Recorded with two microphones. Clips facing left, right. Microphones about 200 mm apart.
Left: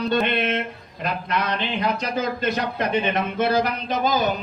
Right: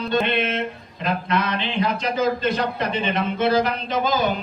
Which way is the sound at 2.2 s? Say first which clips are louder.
Right 6 dB; 50° left (ahead or behind).